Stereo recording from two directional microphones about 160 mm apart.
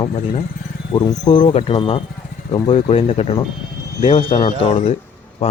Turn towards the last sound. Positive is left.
turn(degrees=35)  # may be behind; listen again after turning